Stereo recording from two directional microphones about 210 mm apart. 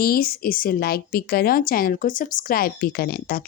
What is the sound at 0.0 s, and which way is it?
A woman's voice, 45° left (ahead or behind).